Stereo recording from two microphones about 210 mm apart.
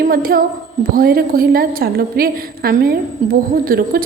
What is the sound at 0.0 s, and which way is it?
A child's voice, 45° right (ahead or behind).